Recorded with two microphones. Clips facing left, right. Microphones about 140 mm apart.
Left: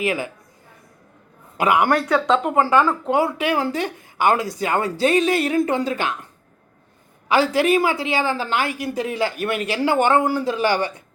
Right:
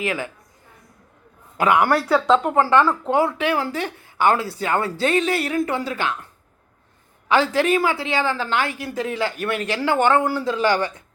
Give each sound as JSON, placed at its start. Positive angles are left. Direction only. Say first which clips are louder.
{"t": 0.0, "sound": "speech", "louder": "left 2 dB", "side_deg": 15}
{"t": 1.5, "sound": "speech", "louder": "even", "side_deg": 10}
{"t": 1.9, "sound": "speech", "louder": "right 1 dB", "side_deg": -5}
{"t": 2.4, "sound": "speech", "louder": "even", "side_deg": 10}
{"t": 7.3, "sound": "speech", "louder": "left 1 dB", "side_deg": 10}